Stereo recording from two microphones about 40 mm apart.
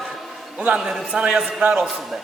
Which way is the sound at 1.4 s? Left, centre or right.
Right.